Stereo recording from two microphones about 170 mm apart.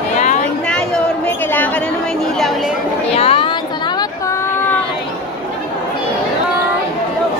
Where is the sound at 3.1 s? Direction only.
35° left (ahead or behind).